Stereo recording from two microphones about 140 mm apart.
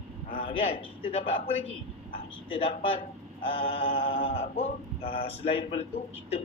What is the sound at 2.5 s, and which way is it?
A man's voice, 45° left (ahead or behind).